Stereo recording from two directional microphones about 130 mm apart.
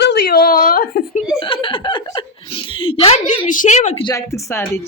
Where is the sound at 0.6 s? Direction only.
90° left.